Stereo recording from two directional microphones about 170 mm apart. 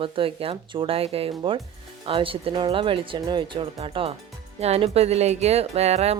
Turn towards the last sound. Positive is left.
turn(degrees=-40)  # may be behind; listen again after turning